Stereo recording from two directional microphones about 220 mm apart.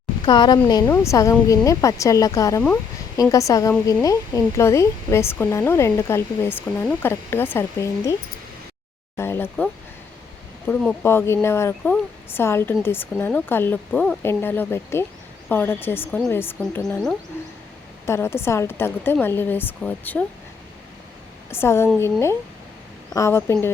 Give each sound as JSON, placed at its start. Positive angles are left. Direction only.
{"t": 0.3, "sound": "speech", "side_deg": 20}
{"t": 9.1, "sound": "speech", "side_deg": 10}
{"t": 10.7, "sound": "speech", "side_deg": 5}
{"t": 21.5, "sound": "speech", "side_deg": 10}